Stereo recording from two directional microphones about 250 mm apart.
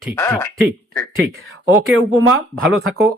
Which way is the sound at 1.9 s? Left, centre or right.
Right.